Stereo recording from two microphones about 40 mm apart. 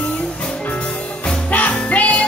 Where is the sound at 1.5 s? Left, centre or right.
Left.